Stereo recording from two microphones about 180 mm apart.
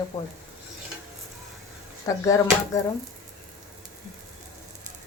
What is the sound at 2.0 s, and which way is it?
Speech, 20° left (ahead or behind).